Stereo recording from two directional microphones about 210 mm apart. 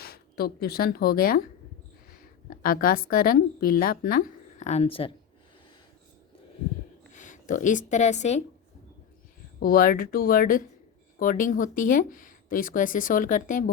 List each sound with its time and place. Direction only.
0.0 s speech: 45° left (ahead or behind)
2.5 s a woman's voice: 45° left (ahead or behind); by 5.1 s 25° left (ahead or behind)
7.1 s speech: 35° left (ahead or behind)
9.6 s a woman's voice: 45° left (ahead or behind)